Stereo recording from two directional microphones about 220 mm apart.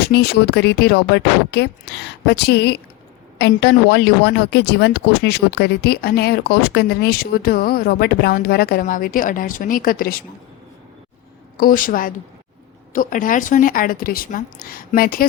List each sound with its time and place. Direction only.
0.0 s speech: 45° left (ahead or behind)
11.5 s speech: 40° left (ahead or behind)